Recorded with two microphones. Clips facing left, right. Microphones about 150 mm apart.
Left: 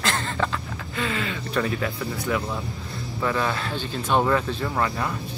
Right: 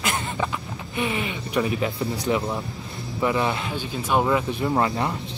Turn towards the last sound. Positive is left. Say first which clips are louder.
# right 3 dB
turn(degrees=-25)  # may be behind; listen again after turning